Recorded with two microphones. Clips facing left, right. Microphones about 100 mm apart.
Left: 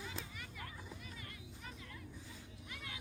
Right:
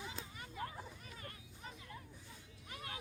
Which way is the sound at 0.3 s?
30° right (ahead or behind).